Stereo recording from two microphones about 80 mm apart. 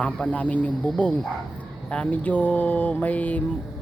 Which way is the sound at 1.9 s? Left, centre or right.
Centre.